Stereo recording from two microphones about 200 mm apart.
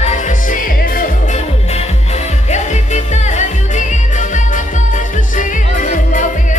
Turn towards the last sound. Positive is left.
turn(degrees=40)  # may be behind; listen again after turning